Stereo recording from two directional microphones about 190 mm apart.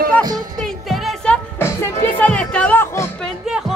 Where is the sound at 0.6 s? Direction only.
Centre (ahead or behind).